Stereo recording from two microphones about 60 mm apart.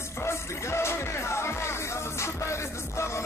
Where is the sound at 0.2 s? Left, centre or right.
Left.